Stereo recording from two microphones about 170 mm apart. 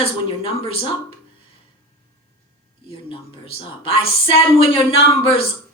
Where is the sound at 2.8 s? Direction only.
30° left (ahead or behind).